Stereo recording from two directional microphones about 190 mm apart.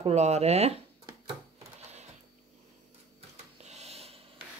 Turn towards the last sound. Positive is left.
turn(degrees=-30)  # may be behind; listen again after turning